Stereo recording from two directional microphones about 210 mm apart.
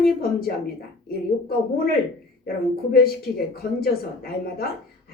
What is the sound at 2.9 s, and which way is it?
Speech, 45° left (ahead or behind).